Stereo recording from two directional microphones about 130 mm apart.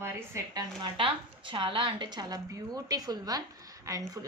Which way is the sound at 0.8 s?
40° right (ahead or behind).